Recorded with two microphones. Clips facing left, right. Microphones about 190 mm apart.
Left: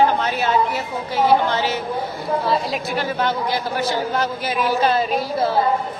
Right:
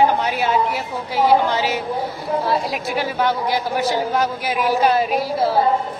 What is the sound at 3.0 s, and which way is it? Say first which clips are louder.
A man's voice: right 2 dB; 10° right (ahead or behind).